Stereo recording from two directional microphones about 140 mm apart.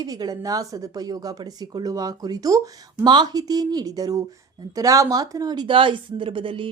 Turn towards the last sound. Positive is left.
turn(degrees=-35)  # may be behind; listen again after turning